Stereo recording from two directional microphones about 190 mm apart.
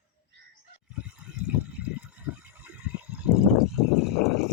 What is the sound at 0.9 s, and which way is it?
Water, 5° right (ahead or behind).